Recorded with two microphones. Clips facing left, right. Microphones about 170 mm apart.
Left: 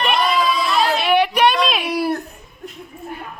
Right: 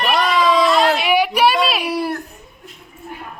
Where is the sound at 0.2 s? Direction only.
90° right.